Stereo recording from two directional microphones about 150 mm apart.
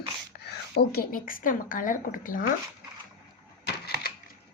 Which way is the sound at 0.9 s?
75° left (ahead or behind).